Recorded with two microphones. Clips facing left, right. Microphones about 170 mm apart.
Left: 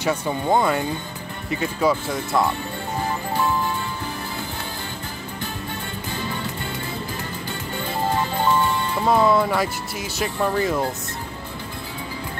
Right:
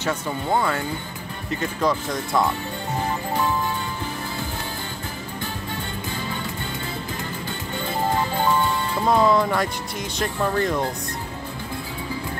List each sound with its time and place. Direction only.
0.0 s speech: 15° left (ahead or behind)
9.0 s speech: 5° left (ahead or behind)